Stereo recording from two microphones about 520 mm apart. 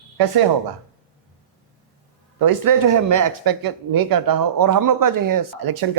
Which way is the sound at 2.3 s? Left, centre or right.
Right.